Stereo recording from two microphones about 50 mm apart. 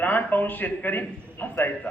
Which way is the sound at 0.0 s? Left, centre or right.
Left.